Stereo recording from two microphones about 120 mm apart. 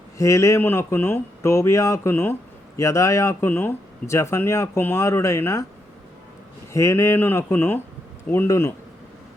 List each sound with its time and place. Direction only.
0.2 s speech: 25° left (ahead or behind)
6.7 s speech: 25° left (ahead or behind)